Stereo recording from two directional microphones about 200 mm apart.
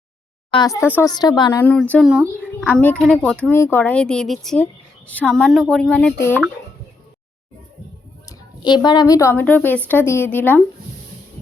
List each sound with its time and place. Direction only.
0.5 s a woman's voice: 20° left (ahead or behind)
2.0 s a child's voice: 5° right (ahead or behind); by 6.4 s 10° left (ahead or behind)
8.3 s a woman's voice: 20° left (ahead or behind)